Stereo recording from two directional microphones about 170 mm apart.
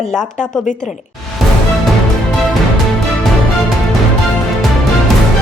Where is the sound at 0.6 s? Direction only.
45° left (ahead or behind).